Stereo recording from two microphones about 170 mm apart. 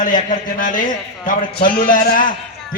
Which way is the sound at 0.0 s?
50° left (ahead or behind).